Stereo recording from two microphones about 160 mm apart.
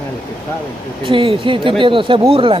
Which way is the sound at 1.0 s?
35° right (ahead or behind).